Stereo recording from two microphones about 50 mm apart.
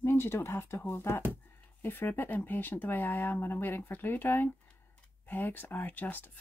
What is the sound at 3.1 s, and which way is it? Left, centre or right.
Speech, left.